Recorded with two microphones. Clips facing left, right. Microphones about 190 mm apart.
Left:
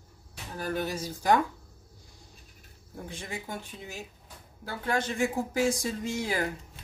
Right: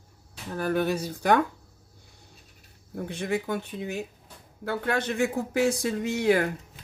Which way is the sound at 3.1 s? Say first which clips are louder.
Right 10 dB; 65° right (ahead or behind).